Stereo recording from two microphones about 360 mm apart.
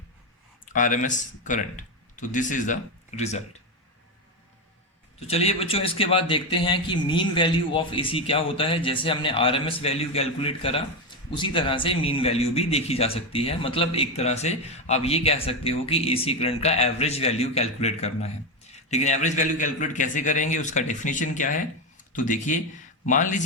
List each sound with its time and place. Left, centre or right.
0.6 s speech: left
5.3 s a man's voice: centre